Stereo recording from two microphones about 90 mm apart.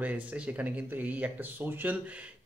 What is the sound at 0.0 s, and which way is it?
Speech, 15° right (ahead or behind).